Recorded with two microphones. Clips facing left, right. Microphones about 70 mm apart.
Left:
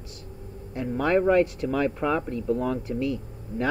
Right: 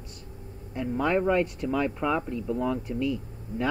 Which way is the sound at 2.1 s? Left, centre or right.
Centre.